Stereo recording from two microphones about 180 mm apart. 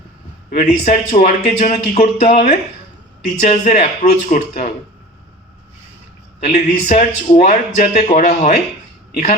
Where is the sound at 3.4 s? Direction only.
35° left (ahead or behind).